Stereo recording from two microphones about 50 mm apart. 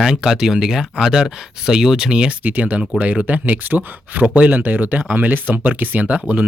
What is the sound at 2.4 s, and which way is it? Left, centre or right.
Speech, right.